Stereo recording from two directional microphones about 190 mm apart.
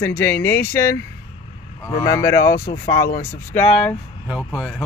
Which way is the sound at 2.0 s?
15° left (ahead or behind).